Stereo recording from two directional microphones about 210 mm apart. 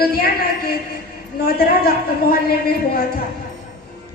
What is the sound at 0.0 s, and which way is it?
A woman's voice, 45° left (ahead or behind).